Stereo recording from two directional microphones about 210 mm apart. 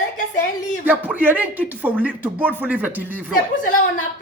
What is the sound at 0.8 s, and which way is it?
Speech, 10° right (ahead or behind).